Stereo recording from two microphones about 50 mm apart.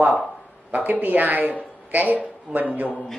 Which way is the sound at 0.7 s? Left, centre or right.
Right.